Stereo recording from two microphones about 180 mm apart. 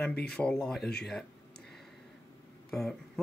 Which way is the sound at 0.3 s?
5° left (ahead or behind).